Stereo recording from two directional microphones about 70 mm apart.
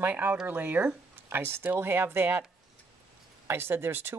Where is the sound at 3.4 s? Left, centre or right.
Right.